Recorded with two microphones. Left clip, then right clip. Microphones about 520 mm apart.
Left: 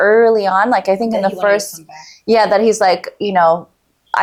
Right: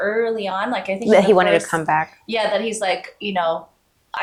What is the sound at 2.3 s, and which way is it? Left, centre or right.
Speech, left.